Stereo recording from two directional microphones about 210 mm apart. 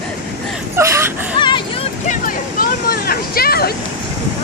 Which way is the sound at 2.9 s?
45° left (ahead or behind).